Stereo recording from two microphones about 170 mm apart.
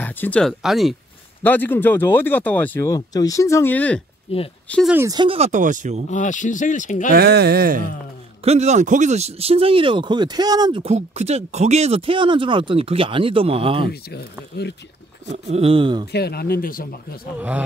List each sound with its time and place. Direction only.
0.0 s speech: 10° left (ahead or behind)
1.4 s speech: 10° left (ahead or behind)
4.3 s speech: 35° left (ahead or behind)
4.6 s speech: 5° left (ahead or behind)
4.9 s speech: 20° right (ahead or behind)
5.5 s speech: 50° right (ahead or behind)
6.0 s speech: 45° left (ahead or behind)
7.1 s speech: 70° right (ahead or behind)
8.5 s speech: 40° right (ahead or behind)
15.5 s speech: 35° right (ahead or behind)
16.1 s speech: 70° left (ahead or behind)